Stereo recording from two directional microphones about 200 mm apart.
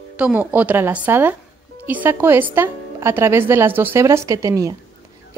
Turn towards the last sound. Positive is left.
turn(degrees=-15)  # may be behind; listen again after turning